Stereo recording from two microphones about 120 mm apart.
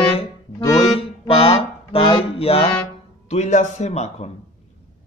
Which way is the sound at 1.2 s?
55° left (ahead or behind).